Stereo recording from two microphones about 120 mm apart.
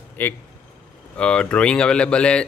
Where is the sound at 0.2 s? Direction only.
20° left (ahead or behind).